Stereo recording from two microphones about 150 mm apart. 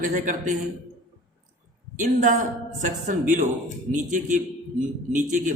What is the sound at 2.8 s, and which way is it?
A man's voice, 60° right (ahead or behind).